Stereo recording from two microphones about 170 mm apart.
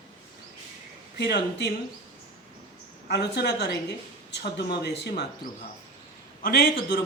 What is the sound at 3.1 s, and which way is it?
Speech, 80° left.